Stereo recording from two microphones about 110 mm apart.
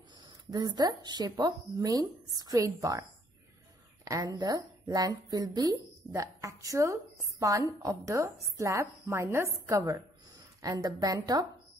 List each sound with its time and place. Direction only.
0.5 s speech: 40° right (ahead or behind)